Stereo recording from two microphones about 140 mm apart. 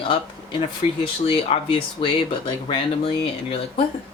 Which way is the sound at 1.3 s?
40° left (ahead or behind).